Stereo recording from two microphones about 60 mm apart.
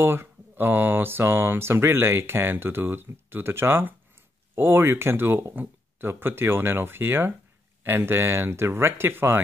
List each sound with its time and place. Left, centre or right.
0.0 s speech: right